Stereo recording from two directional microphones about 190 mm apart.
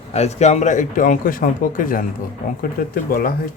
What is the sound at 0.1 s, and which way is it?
Speech, 35° left (ahead or behind).